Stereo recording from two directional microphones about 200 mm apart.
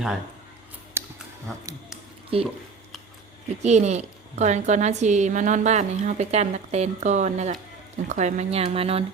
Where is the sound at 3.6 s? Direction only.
35° right (ahead or behind).